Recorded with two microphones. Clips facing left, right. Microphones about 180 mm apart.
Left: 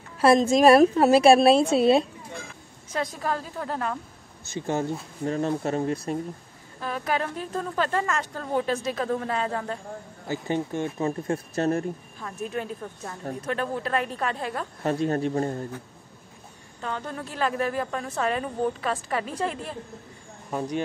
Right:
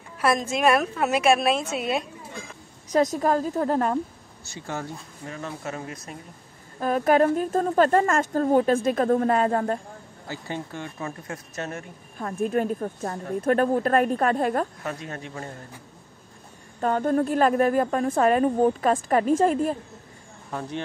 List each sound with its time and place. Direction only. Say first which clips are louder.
0.2 s a woman's voice: left 5 dB; 30° left (ahead or behind)
2.9 s a woman's voice: right 7 dB; 40° right (ahead or behind)
4.5 s speech: left 6 dB; 20° left (ahead or behind)
5.2 s a woman's voice: left 9 dB; 35° left (ahead or behind)
6.8 s a woman's voice: right 9 dB; 45° right (ahead or behind)
10.2 s speech: left 6 dB; 20° left (ahead or behind); by 11.8 s 35° left (ahead or behind)
12.2 s a woman's voice: right 9 dB; 50° right (ahead or behind)
14.8 s a woman's voice: left 9 dB; 35° left (ahead or behind)
16.8 s a woman's voice: right 11 dB; 50° right (ahead or behind)
20.5 s speech: left 3 dB; 15° left (ahead or behind)